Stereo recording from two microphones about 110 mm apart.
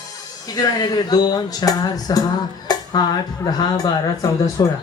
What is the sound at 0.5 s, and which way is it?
Speech, 35° left (ahead or behind).